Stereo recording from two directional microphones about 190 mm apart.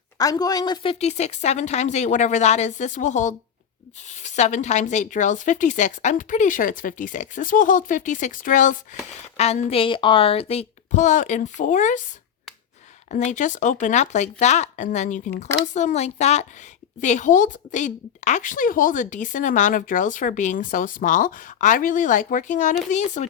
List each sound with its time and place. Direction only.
0.2 s speech: 20° left (ahead or behind); by 11.9 s 40° left (ahead or behind)
13.1 s a woman's voice: 40° left (ahead or behind)